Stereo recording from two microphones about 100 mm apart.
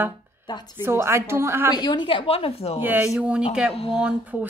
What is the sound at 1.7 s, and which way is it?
A woman's voice, 45° left (ahead or behind).